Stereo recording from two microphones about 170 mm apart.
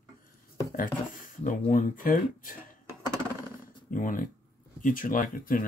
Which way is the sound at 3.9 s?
55° left (ahead or behind).